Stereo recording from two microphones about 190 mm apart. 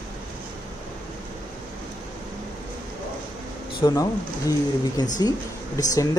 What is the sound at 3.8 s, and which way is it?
Speech, 20° left (ahead or behind).